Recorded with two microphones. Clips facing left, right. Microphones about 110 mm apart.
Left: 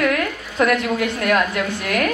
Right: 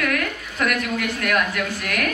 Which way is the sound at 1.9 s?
25° left (ahead or behind).